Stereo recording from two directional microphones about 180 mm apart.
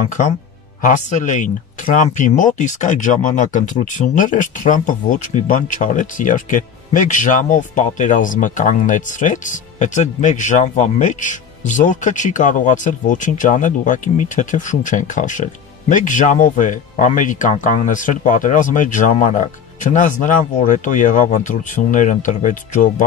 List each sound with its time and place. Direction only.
0.8 s speech: 45° left (ahead or behind)